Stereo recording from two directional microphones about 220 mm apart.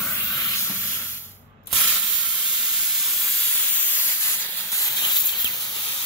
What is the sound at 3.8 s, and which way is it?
Hiss, 10° left (ahead or behind).